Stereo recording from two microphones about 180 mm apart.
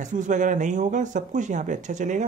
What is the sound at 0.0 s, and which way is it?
Speech, 45° right (ahead or behind).